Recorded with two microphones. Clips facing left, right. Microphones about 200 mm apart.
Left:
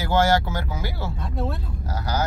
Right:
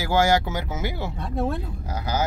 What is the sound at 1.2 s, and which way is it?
Speech, 50° right (ahead or behind).